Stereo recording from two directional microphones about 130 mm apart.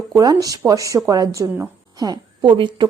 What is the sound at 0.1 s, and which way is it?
A woman's voice, 30° right (ahead or behind).